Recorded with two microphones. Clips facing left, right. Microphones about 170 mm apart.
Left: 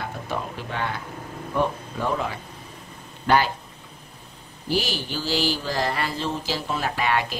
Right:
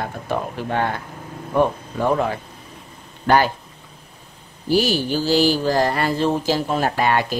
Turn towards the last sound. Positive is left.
turn(degrees=-40)  # may be behind; listen again after turning